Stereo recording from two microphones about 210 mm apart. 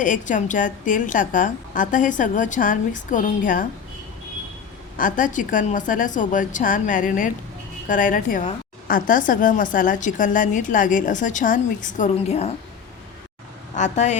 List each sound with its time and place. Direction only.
0.0 s a woman's voice: 40° left (ahead or behind)
4.9 s a woman's voice: 40° left (ahead or behind)
13.7 s a woman's voice: 35° left (ahead or behind)